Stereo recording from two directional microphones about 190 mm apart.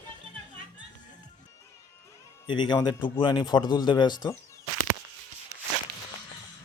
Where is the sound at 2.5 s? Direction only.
25° left (ahead or behind).